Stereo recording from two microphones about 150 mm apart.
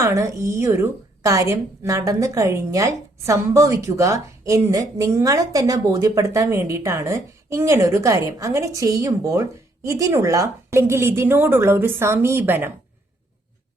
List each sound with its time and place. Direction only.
0.0 s a woman's voice: 20° right (ahead or behind)